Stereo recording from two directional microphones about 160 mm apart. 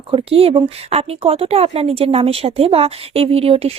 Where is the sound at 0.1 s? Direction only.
35° right (ahead or behind).